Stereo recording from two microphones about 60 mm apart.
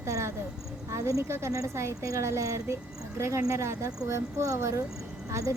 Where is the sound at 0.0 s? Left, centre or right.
Right.